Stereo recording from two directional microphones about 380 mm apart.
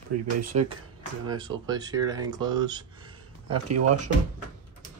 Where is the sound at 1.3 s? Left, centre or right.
Centre.